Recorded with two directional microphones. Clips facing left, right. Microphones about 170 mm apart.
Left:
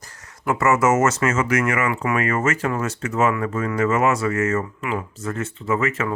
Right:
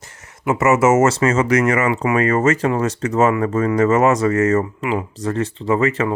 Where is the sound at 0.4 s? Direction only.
20° right (ahead or behind).